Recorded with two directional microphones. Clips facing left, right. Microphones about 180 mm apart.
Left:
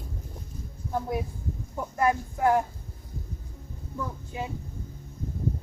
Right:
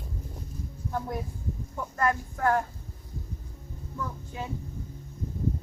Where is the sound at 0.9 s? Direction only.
10° left (ahead or behind).